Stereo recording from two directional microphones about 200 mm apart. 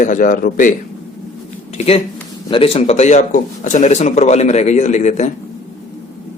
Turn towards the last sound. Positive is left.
turn(degrees=35)  # may be behind; listen again after turning